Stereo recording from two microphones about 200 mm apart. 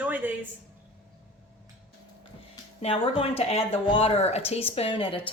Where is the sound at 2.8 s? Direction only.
30° left (ahead or behind).